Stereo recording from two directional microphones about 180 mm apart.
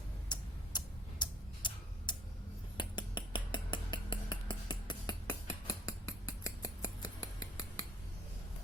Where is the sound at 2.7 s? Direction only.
25° left (ahead or behind).